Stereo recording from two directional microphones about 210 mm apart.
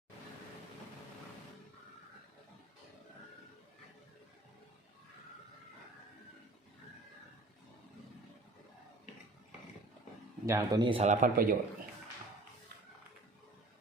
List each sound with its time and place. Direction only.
10.4 s speech: 15° right (ahead or behind); by 11.5 s 40° right (ahead or behind)